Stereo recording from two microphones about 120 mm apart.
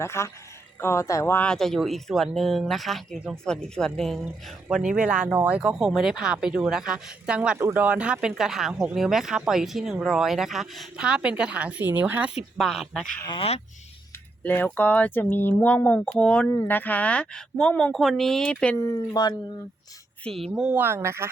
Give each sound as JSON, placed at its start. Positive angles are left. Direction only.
{"t": 0.0, "sound": "speech", "side_deg": 20}
{"t": 1.5, "sound": "speech", "side_deg": 5}
{"t": 12.5, "sound": "speech", "side_deg": 0}
{"t": 13.2, "sound": "speech", "side_deg": 40}
{"t": 14.4, "sound": "speech", "side_deg": 15}
{"t": 19.2, "sound": "speech", "side_deg": 35}
{"t": 20.2, "sound": "speech", "side_deg": 5}
{"t": 20.5, "sound": "speech", "side_deg": -10}
{"t": 20.8, "sound": "speech", "side_deg": -20}